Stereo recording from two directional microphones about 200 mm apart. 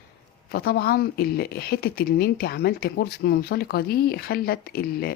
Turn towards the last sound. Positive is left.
turn(degrees=50)  # may be behind; listen again after turning